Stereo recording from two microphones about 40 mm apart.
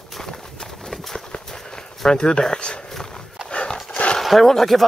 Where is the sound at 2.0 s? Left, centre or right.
Centre.